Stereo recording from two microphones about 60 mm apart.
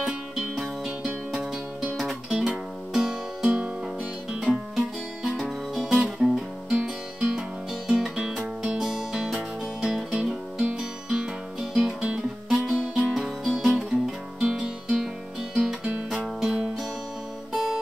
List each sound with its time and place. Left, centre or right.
2.2 s music: centre
5.9 s guitar: centre
7.2 s music: centre
13.1 s music: centre
16.3 s music: centre